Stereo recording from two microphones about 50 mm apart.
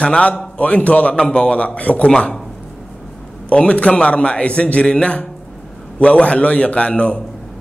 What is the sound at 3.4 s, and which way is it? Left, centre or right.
Speech, left.